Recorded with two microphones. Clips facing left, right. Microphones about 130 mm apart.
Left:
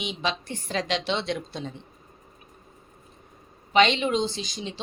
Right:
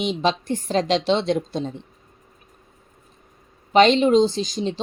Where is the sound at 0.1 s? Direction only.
40° right (ahead or behind).